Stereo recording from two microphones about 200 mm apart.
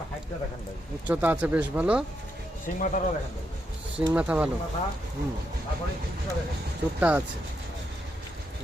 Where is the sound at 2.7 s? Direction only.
40° left (ahead or behind).